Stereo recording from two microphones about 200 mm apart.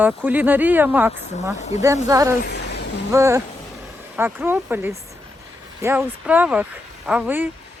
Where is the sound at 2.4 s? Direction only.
55° left (ahead or behind).